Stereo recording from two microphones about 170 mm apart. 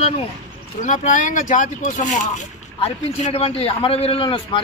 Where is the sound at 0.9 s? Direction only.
45° left (ahead or behind).